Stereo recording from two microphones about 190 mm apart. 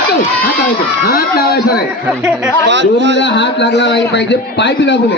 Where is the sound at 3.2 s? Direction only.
70° left (ahead or behind).